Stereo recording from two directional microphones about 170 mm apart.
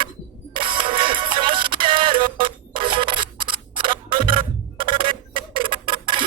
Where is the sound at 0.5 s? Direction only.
30° right (ahead or behind).